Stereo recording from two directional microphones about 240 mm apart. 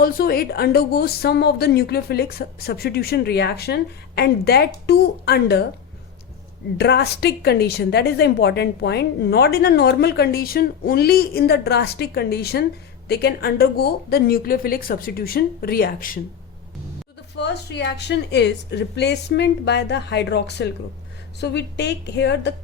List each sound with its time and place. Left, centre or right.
0.0 s a woman's voice: left
6.7 s a woman's voice: left
17.3 s a woman's voice: left